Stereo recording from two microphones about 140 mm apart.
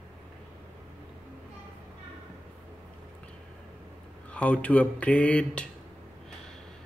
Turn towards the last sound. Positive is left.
turn(degrees=10)  # may be behind; listen again after turning